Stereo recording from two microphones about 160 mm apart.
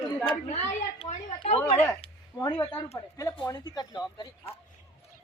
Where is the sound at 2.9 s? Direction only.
20° left (ahead or behind).